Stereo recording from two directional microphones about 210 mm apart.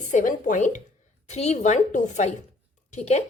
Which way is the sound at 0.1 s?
35° left (ahead or behind).